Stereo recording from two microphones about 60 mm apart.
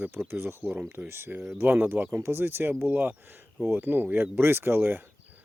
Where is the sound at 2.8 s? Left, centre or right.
Right.